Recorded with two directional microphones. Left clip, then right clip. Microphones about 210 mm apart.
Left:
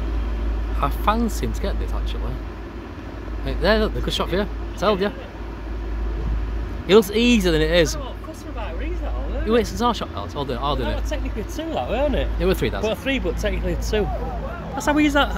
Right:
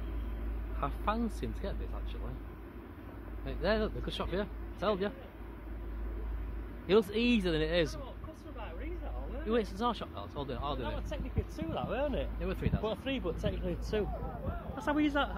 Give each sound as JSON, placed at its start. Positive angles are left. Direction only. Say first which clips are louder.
{"t": 0.7, "sound": "speech", "louder": "left 13 dB", "side_deg": 0}
{"t": 3.4, "sound": "speech", "louder": "left 13 dB", "side_deg": 5}
{"t": 6.9, "sound": "speech", "louder": "left 13 dB", "side_deg": 0}
{"t": 9.5, "sound": "speech", "louder": "left 13 dB", "side_deg": 0}
{"t": 11.1, "sound": "speech", "louder": "left 12 dB", "side_deg": -25}
{"t": 12.4, "sound": "speech", "louder": "left 16 dB", "side_deg": 25}
{"t": 12.8, "sound": "speech", "louder": "left 12 dB", "side_deg": -5}
{"t": 14.8, "sound": "speech", "louder": "left 13 dB", "side_deg": 0}